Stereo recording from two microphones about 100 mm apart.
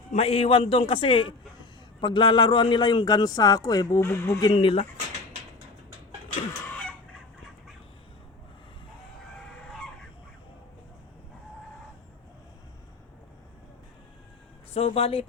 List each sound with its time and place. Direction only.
0.2 s a man's voice: 85° left; by 1.3 s 65° left (ahead or behind)
2.0 s a man's voice: 50° left (ahead or behind); by 4.5 s 30° left (ahead or behind)
4.5 s a man's voice: 75° left (ahead or behind)
14.7 s speech: 85° left